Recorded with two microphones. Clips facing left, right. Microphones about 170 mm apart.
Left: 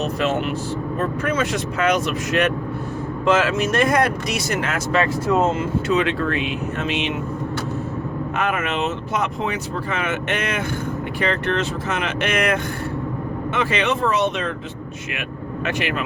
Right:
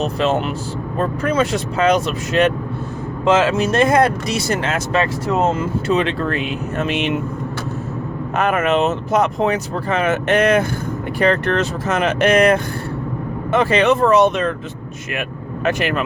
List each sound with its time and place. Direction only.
0.0 s speech: 30° right (ahead or behind); by 7.1 s 50° right (ahead or behind)
8.4 s speech: 45° right (ahead or behind)
15.6 s speech: 40° right (ahead or behind)